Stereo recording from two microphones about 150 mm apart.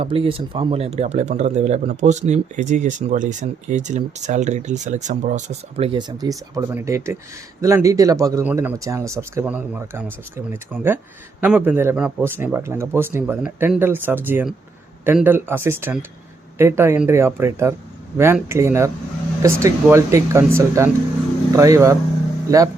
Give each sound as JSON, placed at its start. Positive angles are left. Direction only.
{"t": 0.0, "sound": "speech", "side_deg": -40}